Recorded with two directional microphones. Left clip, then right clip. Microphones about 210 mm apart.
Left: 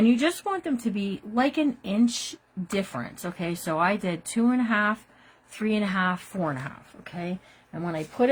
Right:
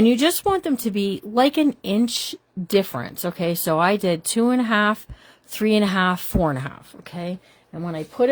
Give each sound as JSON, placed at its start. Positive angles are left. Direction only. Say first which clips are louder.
{"t": 0.0, "sound": "speech", "louder": "right 6 dB", "side_deg": -55}
{"t": 7.7, "sound": "speech", "louder": "right 2 dB", "side_deg": -35}